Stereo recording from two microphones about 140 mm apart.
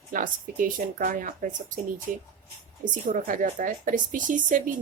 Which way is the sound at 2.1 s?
80° right.